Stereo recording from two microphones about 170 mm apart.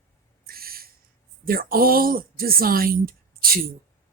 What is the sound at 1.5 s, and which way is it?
Speech, 60° right (ahead or behind).